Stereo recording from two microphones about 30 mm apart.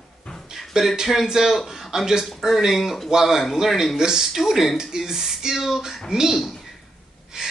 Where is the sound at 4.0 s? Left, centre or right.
Centre.